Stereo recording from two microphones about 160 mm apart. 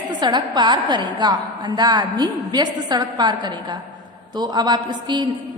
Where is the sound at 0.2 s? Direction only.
30° right (ahead or behind).